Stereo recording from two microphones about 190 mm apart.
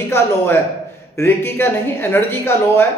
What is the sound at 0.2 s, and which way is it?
Speech, 15° left (ahead or behind).